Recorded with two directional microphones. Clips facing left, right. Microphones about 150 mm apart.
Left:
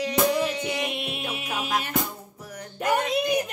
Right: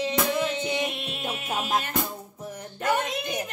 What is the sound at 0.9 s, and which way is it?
Music, 10° left (ahead or behind).